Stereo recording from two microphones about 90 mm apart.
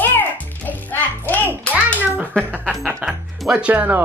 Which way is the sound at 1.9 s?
20° right (ahead or behind).